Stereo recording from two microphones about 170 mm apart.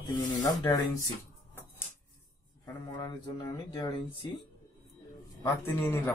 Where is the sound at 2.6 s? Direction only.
25° left (ahead or behind).